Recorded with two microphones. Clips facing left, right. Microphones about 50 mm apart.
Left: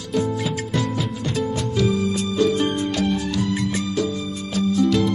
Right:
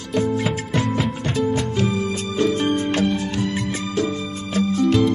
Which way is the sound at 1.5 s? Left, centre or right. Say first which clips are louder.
Even; right.